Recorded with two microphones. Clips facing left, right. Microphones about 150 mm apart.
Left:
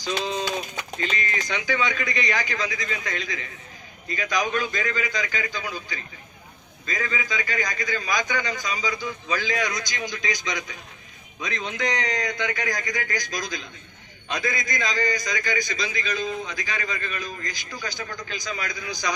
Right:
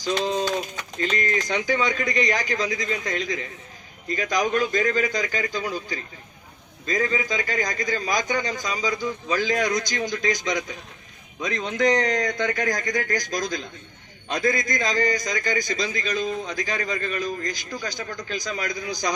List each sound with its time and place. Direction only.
0.9 s a man's voice: 40° right (ahead or behind)